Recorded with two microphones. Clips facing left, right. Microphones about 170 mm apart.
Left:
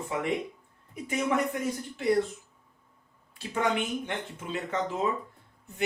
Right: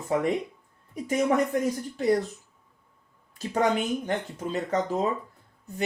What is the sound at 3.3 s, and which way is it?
Speech, 40° right (ahead or behind).